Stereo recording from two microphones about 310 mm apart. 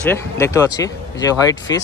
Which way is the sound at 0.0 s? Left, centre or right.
Centre.